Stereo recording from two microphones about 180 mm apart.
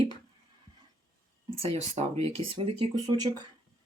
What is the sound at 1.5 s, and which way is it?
Speech, 35° right (ahead or behind).